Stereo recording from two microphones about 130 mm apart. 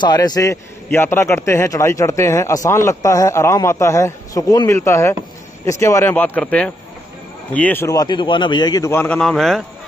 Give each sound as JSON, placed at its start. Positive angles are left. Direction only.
{"t": 0.0, "sound": "a man's voice", "side_deg": 30}
{"t": 8.9, "sound": "speech", "side_deg": 15}
{"t": 9.2, "sound": "a man's voice", "side_deg": 0}